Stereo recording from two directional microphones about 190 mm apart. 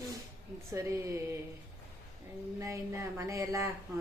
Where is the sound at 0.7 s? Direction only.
15° right (ahead or behind).